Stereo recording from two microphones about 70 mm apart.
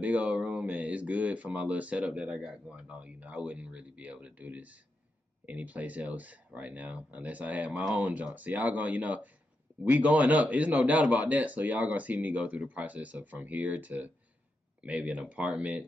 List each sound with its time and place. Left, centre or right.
0.0 s speech: centre